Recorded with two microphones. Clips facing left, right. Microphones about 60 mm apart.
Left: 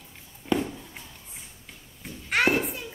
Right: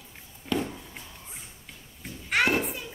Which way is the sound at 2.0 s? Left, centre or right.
Centre.